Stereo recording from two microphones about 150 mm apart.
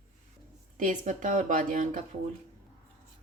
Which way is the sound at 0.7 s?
60° right (ahead or behind).